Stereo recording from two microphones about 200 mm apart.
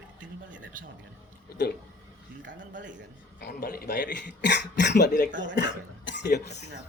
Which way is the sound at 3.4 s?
55° left (ahead or behind).